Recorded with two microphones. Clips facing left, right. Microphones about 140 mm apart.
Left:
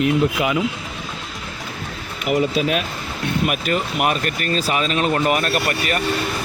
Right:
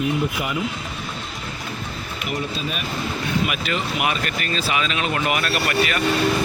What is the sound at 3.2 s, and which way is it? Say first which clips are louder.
Speech: left 5 dB; 45° left (ahead or behind).